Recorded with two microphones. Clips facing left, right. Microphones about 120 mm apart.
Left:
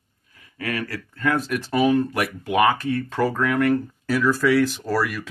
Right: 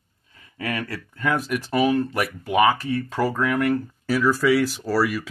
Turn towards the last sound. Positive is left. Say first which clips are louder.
# right 2 dB
turn(degrees=-5)  # may be behind; listen again after turning